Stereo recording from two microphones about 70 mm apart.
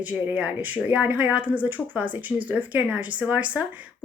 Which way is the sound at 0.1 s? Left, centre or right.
Centre.